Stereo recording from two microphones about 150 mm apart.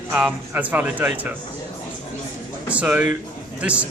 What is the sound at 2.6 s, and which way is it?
A man's voice, 10° right (ahead or behind).